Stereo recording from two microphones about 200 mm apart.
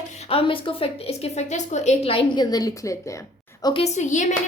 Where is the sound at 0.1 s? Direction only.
30° left (ahead or behind).